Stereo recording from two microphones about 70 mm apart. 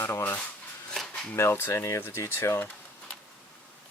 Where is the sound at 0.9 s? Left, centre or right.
Centre.